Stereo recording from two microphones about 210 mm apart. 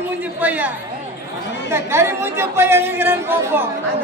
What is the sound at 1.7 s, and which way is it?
Speech, 10° right (ahead or behind).